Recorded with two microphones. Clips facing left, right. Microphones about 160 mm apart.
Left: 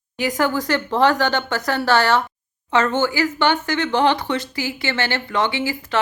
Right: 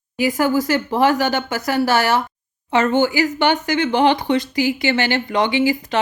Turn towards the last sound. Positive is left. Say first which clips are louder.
# right 6 dB
turn(degrees=-15)  # may be behind; listen again after turning